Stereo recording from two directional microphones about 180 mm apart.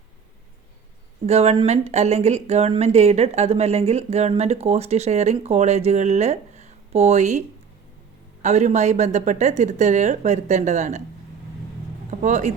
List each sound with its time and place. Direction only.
1.3 s speech: 35° right (ahead or behind)
12.2 s speech: 40° right (ahead or behind)